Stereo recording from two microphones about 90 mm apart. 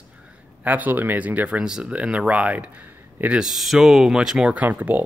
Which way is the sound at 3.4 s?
Centre (ahead or behind).